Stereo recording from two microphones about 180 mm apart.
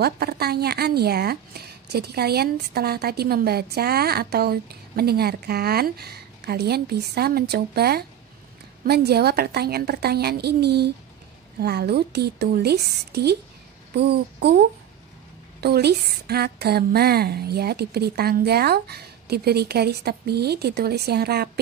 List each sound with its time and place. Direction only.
0.0 s speech: 60° right (ahead or behind)
15.6 s speech: 65° right (ahead or behind)